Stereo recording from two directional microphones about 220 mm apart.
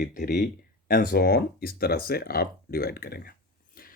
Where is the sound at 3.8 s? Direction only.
40° left (ahead or behind).